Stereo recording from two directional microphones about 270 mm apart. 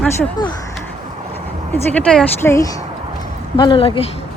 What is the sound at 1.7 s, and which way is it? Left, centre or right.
Speech, centre.